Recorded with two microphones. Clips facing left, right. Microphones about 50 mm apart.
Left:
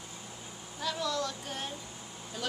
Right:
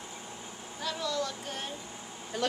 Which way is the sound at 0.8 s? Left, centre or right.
Centre.